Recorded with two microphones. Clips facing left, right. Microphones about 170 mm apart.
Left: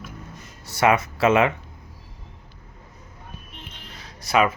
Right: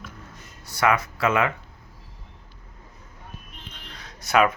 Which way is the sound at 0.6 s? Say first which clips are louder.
Left 3 dB; 25° left (ahead or behind).